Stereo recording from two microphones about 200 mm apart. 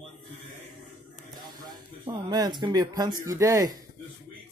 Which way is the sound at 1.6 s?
20° right (ahead or behind).